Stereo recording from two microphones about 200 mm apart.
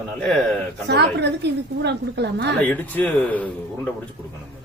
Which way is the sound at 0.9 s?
55° right (ahead or behind).